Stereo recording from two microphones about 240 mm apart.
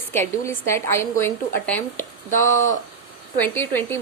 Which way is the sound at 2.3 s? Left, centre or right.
Left.